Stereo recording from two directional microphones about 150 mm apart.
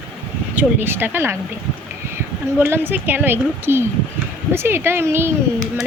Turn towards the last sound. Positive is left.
turn(degrees=-15)  # may be behind; listen again after turning